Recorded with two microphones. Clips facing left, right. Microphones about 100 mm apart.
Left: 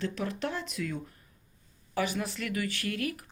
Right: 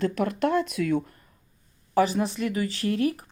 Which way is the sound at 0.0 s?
50° right (ahead or behind).